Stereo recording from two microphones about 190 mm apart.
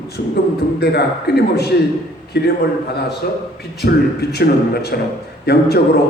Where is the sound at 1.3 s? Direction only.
60° left (ahead or behind).